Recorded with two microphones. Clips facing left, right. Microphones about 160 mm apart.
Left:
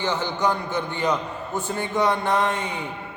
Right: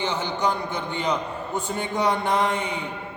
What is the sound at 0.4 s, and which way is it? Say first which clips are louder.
A man's voice: left 2 dB; 15° right (ahead or behind).